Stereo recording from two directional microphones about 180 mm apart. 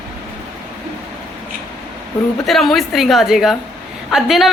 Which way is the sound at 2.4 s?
Centre (ahead or behind).